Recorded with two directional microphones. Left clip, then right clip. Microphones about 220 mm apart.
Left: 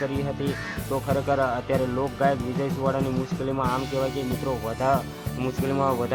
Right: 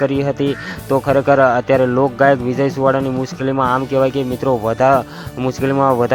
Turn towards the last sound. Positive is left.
turn(degrees=-30)  # may be behind; listen again after turning